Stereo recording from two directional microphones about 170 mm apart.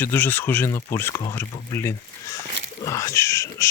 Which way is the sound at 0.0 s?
10° left (ahead or behind).